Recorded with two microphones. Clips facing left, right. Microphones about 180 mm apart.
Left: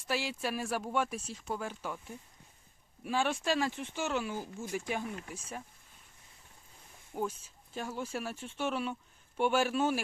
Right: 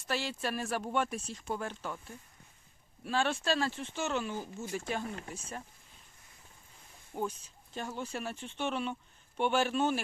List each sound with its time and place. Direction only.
0.1 s speech: 10° left (ahead or behind)
7.1 s speech: 5° left (ahead or behind)